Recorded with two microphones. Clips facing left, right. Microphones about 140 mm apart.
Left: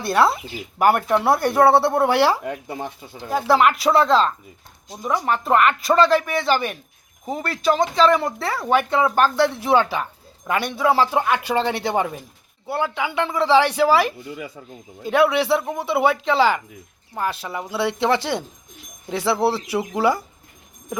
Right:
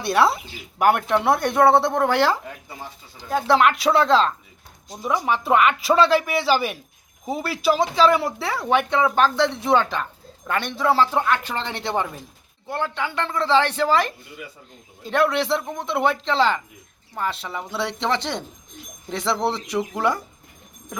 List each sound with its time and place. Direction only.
0.0 s speech: centre (ahead or behind)
2.4 s speech: 60° left (ahead or behind)
3.2 s speech: 5° left (ahead or behind)